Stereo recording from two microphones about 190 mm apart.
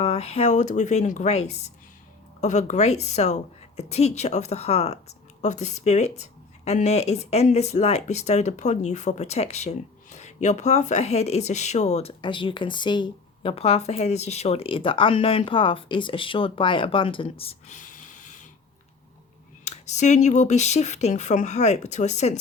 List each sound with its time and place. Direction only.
0.0 s speech: 35° left (ahead or behind)
19.6 s speech: 35° left (ahead or behind)